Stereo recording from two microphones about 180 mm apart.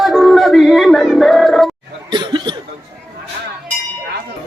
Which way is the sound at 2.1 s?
25° right (ahead or behind).